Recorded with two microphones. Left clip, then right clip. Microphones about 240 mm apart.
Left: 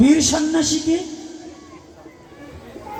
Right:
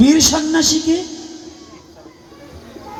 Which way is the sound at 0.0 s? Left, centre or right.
Right.